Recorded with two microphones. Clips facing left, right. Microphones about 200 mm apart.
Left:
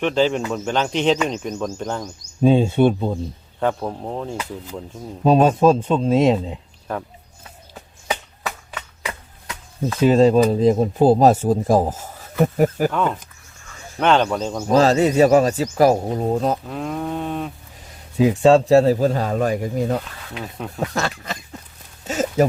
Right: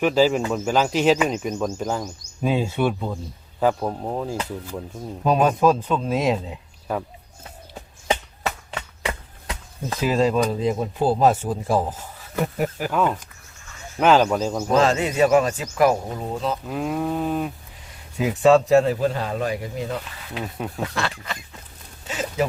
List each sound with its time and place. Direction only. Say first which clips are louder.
0.0 s speech: right 1 dB; 5° right (ahead or behind)
2.4 s speech: left 7 dB; 30° left (ahead or behind)
3.8 s speech: right 1 dB; 10° right (ahead or behind)
5.2 s speech: left 4 dB; 30° left (ahead or behind)
6.9 s cattle: right 1 dB; 5° right (ahead or behind)
8.4 s chop: right 2 dB; 30° right (ahead or behind)
10.0 s speech: left 6 dB; 30° left (ahead or behind)
12.9 s cattle: even; 5° right (ahead or behind)
14.7 s speech: left 5 dB; 35° left (ahead or behind)
16.6 s cattle: right 1 dB; 5° right (ahead or behind)
18.2 s speech: left 3 dB; 30° left (ahead or behind)
22.0 s a sound: left 6 dB; 45° left (ahead or behind)